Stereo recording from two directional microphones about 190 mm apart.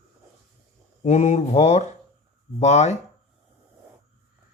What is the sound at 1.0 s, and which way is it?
Speech, 40° left (ahead or behind).